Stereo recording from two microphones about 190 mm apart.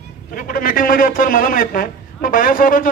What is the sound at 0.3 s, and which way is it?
A man's voice, 45° left (ahead or behind).